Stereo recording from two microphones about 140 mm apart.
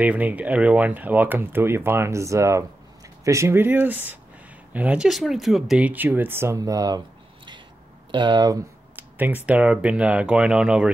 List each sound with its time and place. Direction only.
0.0 s speech: 10° right (ahead or behind)
8.1 s speech: 35° right (ahead or behind)
8.9 s speech: 10° right (ahead or behind)